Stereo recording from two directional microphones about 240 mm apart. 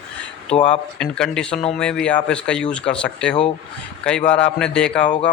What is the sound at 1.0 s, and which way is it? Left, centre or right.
Speech, centre.